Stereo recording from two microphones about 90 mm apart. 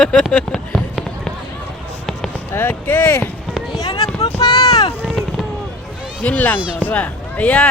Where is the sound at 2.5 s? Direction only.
25° left (ahead or behind).